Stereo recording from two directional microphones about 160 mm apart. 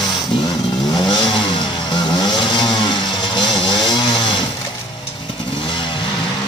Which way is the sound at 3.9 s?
30° left (ahead or behind).